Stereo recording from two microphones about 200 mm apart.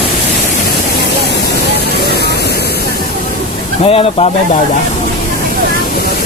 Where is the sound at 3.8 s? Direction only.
30° left (ahead or behind).